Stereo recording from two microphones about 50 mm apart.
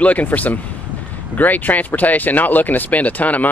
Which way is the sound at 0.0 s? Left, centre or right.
Left.